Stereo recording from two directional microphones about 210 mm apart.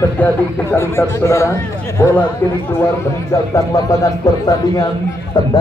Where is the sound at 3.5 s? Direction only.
15° left (ahead or behind).